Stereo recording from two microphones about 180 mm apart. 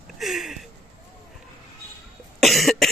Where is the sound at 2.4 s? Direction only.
Centre (ahead or behind).